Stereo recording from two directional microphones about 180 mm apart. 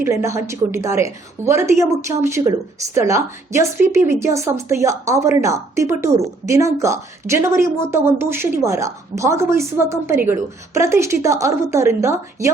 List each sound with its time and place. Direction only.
0.0 s a woman's voice: 15° right (ahead or behind)